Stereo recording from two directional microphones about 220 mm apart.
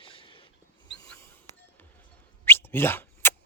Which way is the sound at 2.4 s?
10° left (ahead or behind).